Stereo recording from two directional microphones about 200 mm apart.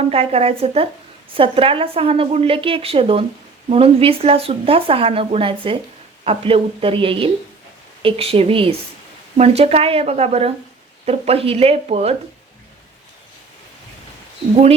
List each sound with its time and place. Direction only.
0.1 s speech: 30° right (ahead or behind)
14.5 s speech: 30° right (ahead or behind)